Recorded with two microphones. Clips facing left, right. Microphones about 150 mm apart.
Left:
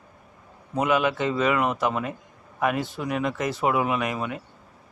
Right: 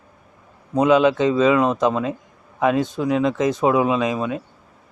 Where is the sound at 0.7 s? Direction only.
15° right (ahead or behind).